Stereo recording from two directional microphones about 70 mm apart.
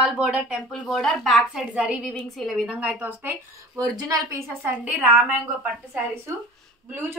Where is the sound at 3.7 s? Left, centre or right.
Right.